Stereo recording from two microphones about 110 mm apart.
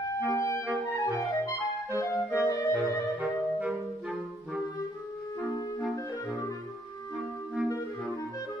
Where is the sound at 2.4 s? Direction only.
30° left (ahead or behind).